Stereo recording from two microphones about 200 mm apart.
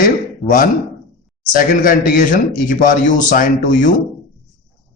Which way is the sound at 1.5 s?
40° left (ahead or behind).